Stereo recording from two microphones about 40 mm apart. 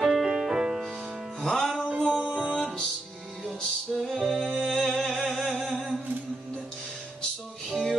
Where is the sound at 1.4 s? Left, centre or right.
Centre.